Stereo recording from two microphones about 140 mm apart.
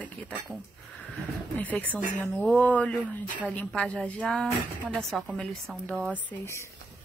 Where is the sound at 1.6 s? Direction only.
10° left (ahead or behind).